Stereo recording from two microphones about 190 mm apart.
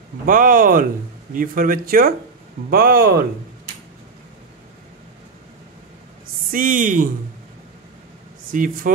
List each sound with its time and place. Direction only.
0.3 s speech: 45° right (ahead or behind)
6.5 s speech: 45° right (ahead or behind)
8.5 s speech: 45° right (ahead or behind)